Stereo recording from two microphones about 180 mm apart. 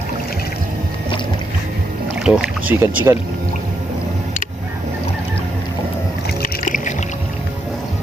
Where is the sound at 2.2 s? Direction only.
5° right (ahead or behind).